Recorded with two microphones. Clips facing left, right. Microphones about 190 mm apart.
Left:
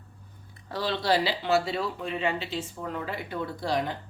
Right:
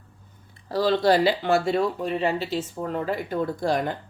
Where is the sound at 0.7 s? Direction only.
40° right (ahead or behind).